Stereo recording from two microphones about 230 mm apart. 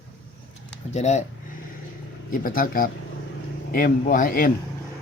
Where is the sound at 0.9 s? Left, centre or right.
Left.